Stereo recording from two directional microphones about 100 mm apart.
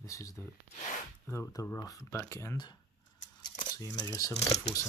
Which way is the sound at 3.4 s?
45° left (ahead or behind).